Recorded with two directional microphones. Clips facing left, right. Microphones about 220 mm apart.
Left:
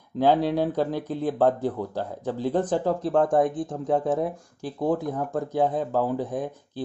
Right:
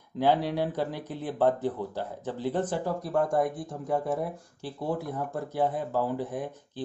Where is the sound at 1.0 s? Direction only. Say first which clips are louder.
Left 2 dB; 15° left (ahead or behind).